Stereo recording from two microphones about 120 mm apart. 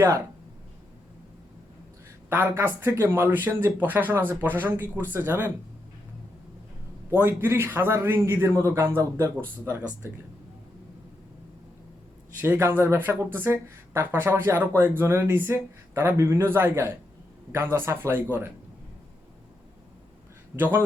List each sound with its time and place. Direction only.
2.3 s speech: 20° right (ahead or behind)
7.1 s speech: 15° right (ahead or behind)
12.4 s speech: 20° right (ahead or behind)
20.6 s speech: 15° right (ahead or behind)